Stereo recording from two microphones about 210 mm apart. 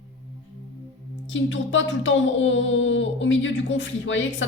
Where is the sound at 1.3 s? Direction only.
60° left (ahead or behind).